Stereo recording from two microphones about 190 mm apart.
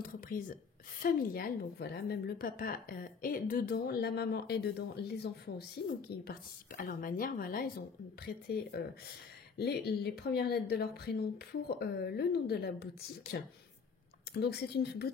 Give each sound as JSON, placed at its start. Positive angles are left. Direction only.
{"t": 0.0, "sound": "whispering", "side_deg": 45}
{"t": 1.0, "sound": "a woman's voice", "side_deg": 50}